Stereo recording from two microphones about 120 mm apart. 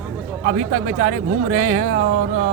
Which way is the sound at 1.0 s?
90° right.